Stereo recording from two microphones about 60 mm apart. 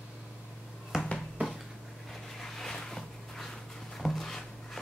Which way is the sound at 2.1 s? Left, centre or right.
Centre.